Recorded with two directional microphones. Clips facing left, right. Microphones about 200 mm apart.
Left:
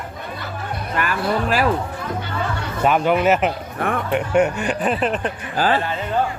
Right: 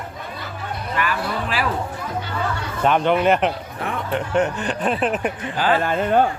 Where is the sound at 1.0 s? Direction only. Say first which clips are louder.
Left 3 dB; 45° left (ahead or behind).